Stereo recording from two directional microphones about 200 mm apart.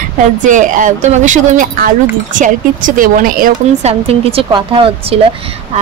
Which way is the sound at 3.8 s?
30° right (ahead or behind).